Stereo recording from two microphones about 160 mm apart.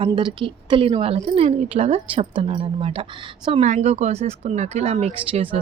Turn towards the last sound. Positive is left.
turn(degrees=-35)  # may be behind; listen again after turning